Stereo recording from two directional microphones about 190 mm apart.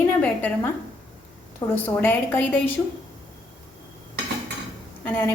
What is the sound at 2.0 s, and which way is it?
Speech, 10° left (ahead or behind).